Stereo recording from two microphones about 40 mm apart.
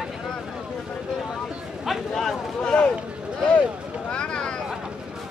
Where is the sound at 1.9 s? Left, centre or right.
Centre.